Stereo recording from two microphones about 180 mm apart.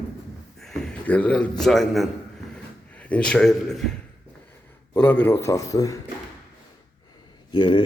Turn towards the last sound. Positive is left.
turn(degrees=25)  # may be behind; listen again after turning